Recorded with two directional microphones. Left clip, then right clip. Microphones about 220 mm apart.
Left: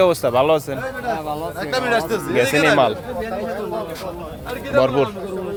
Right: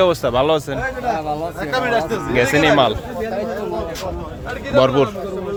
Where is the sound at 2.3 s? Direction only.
Centre (ahead or behind).